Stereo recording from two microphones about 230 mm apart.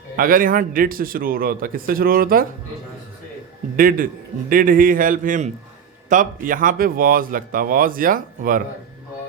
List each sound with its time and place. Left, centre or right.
0.2 s speech: right
3.8 s speech: right